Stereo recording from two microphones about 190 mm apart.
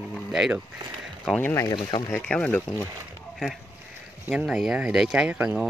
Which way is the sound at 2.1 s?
5° left (ahead or behind).